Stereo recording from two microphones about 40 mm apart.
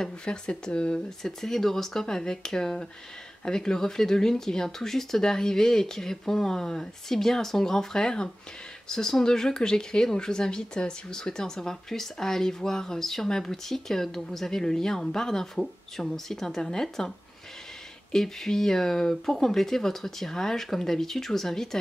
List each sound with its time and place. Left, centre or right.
0.0 s speech: left
1.2 s speech: centre
18.1 s speech: centre